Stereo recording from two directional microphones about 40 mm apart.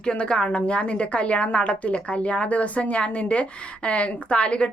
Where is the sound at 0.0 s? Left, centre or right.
Left.